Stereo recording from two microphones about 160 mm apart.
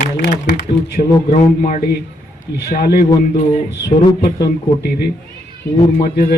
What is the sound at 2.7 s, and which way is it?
Speech, 70° left (ahead or behind).